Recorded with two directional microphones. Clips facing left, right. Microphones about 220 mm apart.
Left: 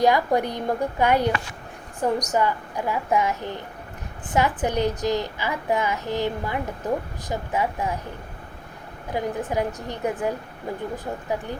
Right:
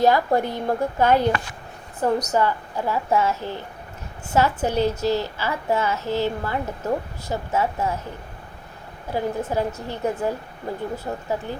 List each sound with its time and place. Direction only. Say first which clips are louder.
0.0 s a woman's voice: right 1 dB; 15° left (ahead or behind)
9.1 s a woman's voice: right 1 dB; 15° left (ahead or behind)